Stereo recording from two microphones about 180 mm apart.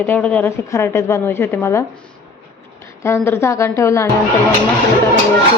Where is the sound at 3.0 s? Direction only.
15° left (ahead or behind).